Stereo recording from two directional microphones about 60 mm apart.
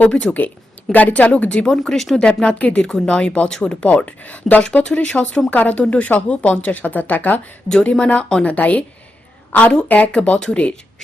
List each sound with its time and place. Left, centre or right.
0.1 s speech: centre
0.9 s speech: left; by 2.2 s centre
2.2 s speech: left
7.7 s a woman's voice: centre